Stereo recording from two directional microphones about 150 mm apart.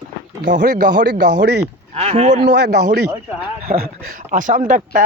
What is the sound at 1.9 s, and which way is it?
Speech, 45° right (ahead or behind).